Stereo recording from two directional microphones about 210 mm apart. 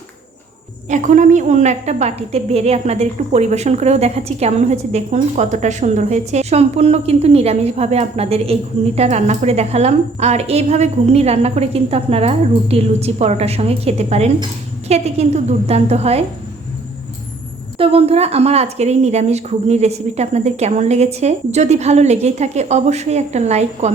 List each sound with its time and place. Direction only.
0.9 s a woman's voice: 35° right (ahead or behind)
17.7 s a woman's voice: 30° right (ahead or behind)